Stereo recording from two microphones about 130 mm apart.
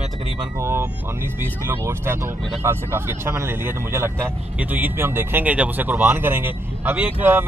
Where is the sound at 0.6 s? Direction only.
20° right (ahead or behind).